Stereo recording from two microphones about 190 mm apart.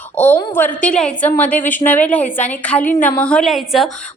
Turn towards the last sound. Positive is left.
turn(degrees=0)  # may be behind; listen again after turning